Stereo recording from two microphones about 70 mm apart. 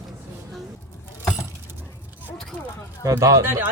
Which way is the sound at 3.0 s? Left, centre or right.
Right.